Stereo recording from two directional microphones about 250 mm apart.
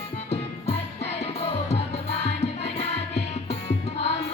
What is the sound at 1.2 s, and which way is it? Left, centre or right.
Music, left.